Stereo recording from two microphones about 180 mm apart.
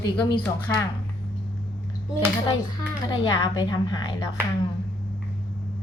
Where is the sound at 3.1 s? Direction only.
25° left (ahead or behind).